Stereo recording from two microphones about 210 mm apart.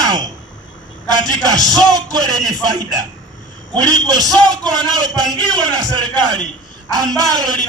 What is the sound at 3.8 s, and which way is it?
Speech, 20° right (ahead or behind).